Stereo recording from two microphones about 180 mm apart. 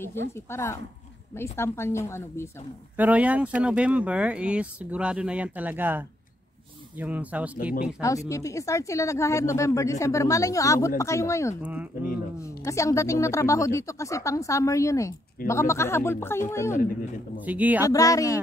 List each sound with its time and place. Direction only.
0.5 s speech: 15° left (ahead or behind)
3.0 s speech: 10° right (ahead or behind)
8.0 s speech: 15° left (ahead or behind)
11.6 s speech: 10° right (ahead or behind)
12.4 s speech: 15° left (ahead or behind)
17.5 s speech: 10° right (ahead or behind)
17.8 s speech: 20° left (ahead or behind)